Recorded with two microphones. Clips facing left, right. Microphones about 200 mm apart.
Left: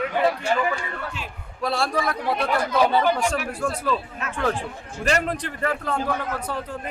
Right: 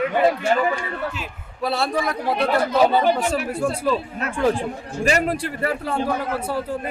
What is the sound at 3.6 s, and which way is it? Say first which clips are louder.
Speech: right 3 dB; 5° right (ahead or behind).